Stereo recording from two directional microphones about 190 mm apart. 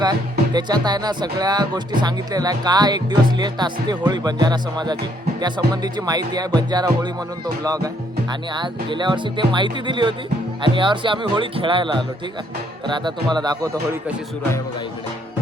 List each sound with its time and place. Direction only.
0.0 s speech: 20° right (ahead or behind)